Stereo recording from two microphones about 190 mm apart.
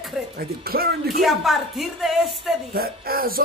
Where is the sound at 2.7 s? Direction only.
50° right (ahead or behind).